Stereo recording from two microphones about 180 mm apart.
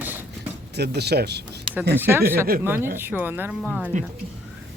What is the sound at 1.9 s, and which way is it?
A woman's voice, 10° right (ahead or behind).